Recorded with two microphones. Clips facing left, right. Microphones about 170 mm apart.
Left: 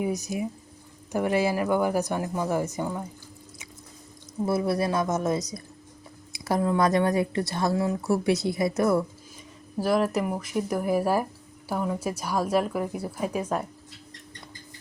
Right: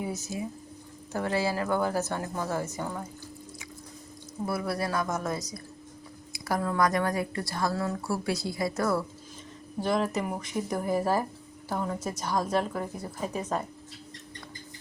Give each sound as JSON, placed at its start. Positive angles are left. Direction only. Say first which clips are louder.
{"t": 0.0, "sound": "speech", "louder": "left 5 dB", "side_deg": 15}
{"t": 4.4, "sound": "speech", "louder": "left 6 dB", "side_deg": 25}
{"t": 9.8, "sound": "speech", "louder": "left 4 dB", "side_deg": 5}